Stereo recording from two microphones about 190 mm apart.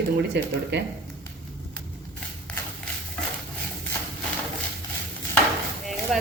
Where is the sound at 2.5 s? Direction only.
5° left (ahead or behind).